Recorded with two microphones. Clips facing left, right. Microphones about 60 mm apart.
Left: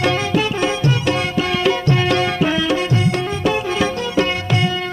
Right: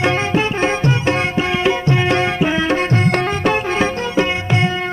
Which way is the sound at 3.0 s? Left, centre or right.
Right.